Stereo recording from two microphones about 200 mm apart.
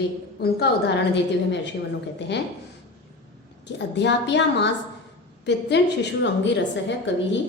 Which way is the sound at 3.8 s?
60° left (ahead or behind).